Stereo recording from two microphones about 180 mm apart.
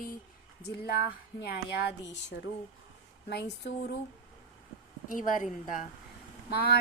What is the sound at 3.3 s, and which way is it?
Speech, 70° left (ahead or behind).